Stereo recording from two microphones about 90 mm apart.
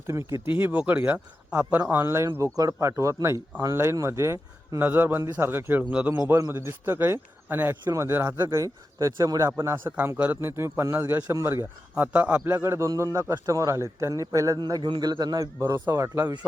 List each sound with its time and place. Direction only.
0.1 s speech: 35° right (ahead or behind)
0.6 s a man's voice: 15° right (ahead or behind); by 4.8 s 35° right (ahead or behind)
4.8 s a man's voice: 20° right (ahead or behind)
8.5 s a man's voice: 35° right (ahead or behind)
14.8 s speech: 60° right (ahead or behind); by 16.2 s 35° right (ahead or behind)